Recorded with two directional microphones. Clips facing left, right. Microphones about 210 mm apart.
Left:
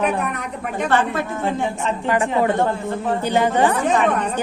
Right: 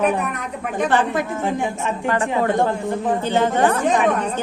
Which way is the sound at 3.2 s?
15° left (ahead or behind).